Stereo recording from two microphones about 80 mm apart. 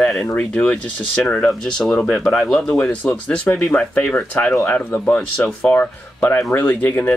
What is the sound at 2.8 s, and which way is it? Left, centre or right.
Speech, left.